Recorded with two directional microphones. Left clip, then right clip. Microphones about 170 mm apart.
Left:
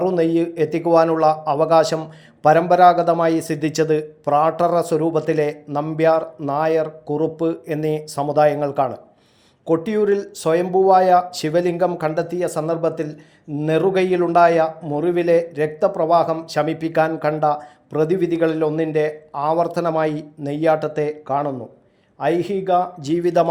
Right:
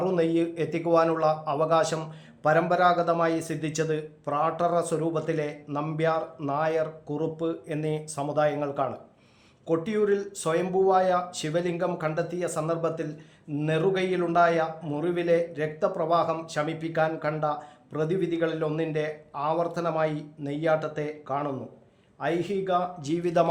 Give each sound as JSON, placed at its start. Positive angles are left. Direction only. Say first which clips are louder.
{"t": 0.0, "sound": "speech", "louder": "left 7 dB", "side_deg": 25}
{"t": 5.6, "sound": "speech", "louder": "left 8 dB", "side_deg": 20}
{"t": 6.0, "sound": "a man's voice", "louder": "left 10 dB", "side_deg": 30}